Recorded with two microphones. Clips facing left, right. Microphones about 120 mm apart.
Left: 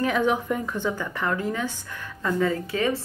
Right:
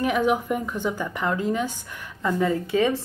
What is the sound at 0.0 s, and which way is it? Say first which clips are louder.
Speech: right 1 dB; 10° right (ahead or behind).